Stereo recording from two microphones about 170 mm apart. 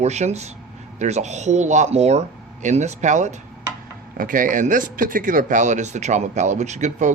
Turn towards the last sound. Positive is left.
turn(degrees=-45)  # may be behind; listen again after turning